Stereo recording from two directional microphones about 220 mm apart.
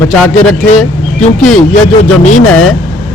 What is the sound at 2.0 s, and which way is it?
Speech, 35° left (ahead or behind).